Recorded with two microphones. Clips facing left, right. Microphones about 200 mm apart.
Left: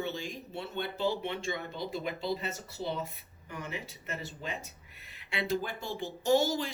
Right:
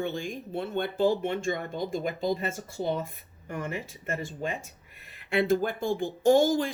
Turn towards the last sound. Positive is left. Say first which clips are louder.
# right 6 dB
turn(degrees=-50)  # may be behind; listen again after turning